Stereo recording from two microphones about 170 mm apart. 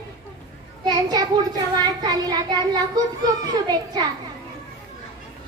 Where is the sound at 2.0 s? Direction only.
25° right (ahead or behind).